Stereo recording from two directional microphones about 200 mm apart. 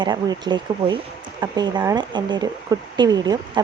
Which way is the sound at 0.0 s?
20° right (ahead or behind).